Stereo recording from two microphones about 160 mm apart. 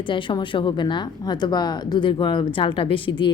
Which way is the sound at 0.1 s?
30° left (ahead or behind).